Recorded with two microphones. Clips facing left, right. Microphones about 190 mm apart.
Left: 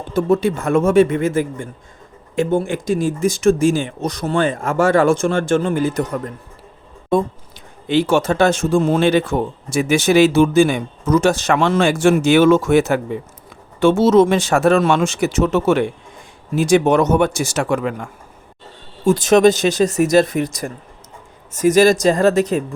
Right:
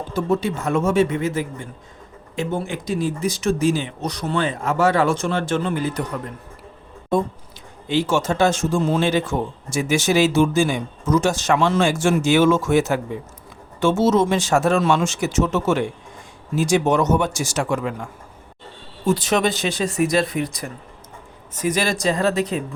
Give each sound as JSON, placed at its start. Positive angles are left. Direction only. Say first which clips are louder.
{"t": 0.1, "sound": "speech", "louder": "left 6 dB", "side_deg": 55}
{"t": 7.9, "sound": "speech", "louder": "left 4 dB", "side_deg": 60}
{"t": 19.0, "sound": "speech", "louder": "left 8 dB", "side_deg": 45}